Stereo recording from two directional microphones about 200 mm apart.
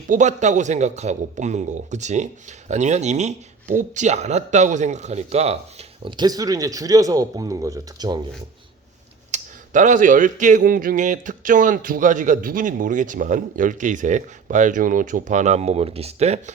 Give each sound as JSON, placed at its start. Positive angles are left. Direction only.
{"t": 0.1, "sound": "a man's voice", "side_deg": -35}
{"t": 9.3, "sound": "speech", "side_deg": -40}